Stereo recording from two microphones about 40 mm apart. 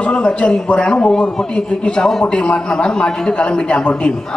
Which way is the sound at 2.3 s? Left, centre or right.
Left.